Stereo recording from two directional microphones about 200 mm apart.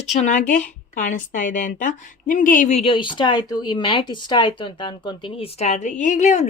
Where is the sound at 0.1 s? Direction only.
35° left (ahead or behind).